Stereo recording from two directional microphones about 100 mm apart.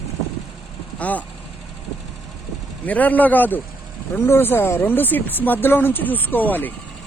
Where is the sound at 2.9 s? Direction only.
15° left (ahead or behind).